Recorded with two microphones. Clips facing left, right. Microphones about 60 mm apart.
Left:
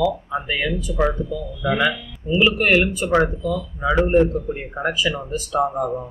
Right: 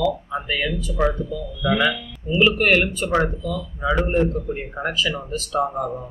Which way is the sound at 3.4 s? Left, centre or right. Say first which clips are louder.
Left 4 dB; left.